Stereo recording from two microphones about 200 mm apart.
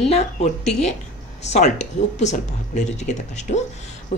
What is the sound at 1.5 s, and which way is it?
Speech, 35° left (ahead or behind).